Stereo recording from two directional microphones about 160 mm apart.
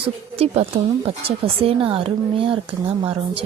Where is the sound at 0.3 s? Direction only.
40° right (ahead or behind).